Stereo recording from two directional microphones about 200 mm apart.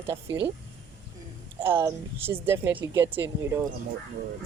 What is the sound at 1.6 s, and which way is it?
A woman's voice, 10° right (ahead or behind).